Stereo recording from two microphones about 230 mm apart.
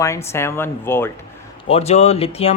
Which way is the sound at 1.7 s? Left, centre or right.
Left.